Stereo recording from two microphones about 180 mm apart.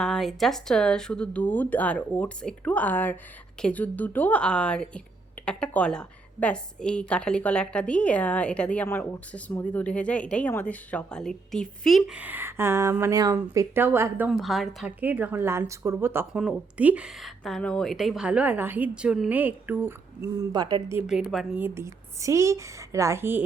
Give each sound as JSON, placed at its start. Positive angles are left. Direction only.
{"t": 0.0, "sound": "a woman's voice", "side_deg": 0}
{"t": 14.3, "sound": "speech", "side_deg": 0}
{"t": 21.1, "sound": "a woman's voice", "side_deg": 0}
{"t": 21.6, "sound": "speech", "side_deg": -15}